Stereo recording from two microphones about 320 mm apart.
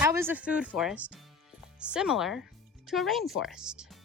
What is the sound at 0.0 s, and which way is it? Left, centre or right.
Speech, centre.